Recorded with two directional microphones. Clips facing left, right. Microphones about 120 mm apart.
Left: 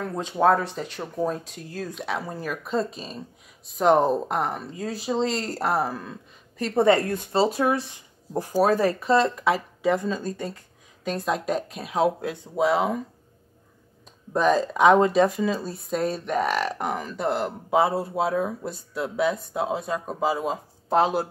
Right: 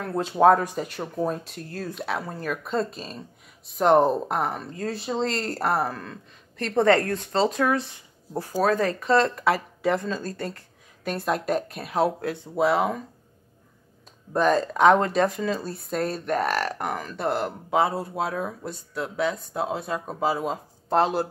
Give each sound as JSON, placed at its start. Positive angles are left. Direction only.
{"t": 0.0, "sound": "speech", "side_deg": -5}
{"t": 9.2, "sound": "speech", "side_deg": 0}
{"t": 11.1, "sound": "speech", "side_deg": 0}
{"t": 14.3, "sound": "speech", "side_deg": 0}